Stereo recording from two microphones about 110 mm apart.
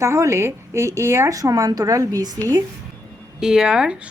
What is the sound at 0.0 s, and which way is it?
A woman's voice, 25° right (ahead or behind).